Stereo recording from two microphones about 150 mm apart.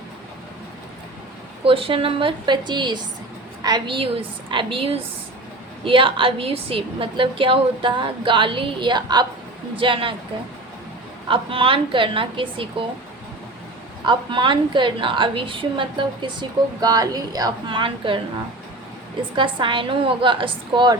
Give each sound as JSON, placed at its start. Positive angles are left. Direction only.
{"t": 1.6, "sound": "a woman's voice", "side_deg": -35}
{"t": 11.3, "sound": "a woman's voice", "side_deg": -35}
{"t": 14.0, "sound": "a woman's voice", "side_deg": -30}
{"t": 19.4, "sound": "a woman's voice", "side_deg": -35}